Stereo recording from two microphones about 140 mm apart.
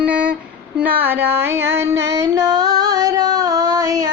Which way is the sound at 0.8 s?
15° right (ahead or behind).